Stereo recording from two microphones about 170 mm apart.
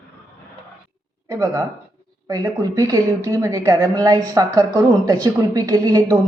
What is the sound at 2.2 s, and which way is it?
A woman's voice, 20° right (ahead or behind).